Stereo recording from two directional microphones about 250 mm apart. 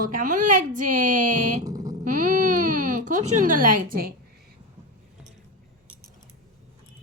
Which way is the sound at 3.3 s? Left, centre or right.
Right.